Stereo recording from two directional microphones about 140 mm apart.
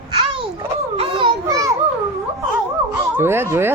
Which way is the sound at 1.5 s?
25° right (ahead or behind).